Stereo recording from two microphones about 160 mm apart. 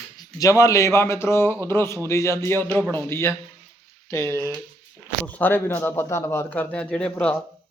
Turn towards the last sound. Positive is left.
turn(degrees=10)  # may be behind; listen again after turning